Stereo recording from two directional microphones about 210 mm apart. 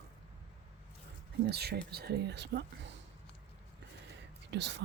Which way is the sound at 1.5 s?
50° right (ahead or behind).